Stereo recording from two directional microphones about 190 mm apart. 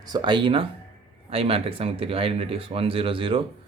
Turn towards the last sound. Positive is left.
turn(degrees=-30)  # may be behind; listen again after turning